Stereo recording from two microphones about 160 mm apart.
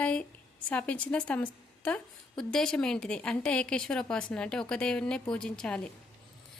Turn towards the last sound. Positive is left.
turn(degrees=5)  # may be behind; listen again after turning